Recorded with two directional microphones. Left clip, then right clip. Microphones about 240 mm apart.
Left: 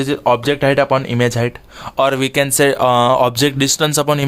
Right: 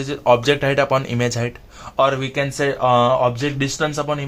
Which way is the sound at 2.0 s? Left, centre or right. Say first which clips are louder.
Left 6 dB; left.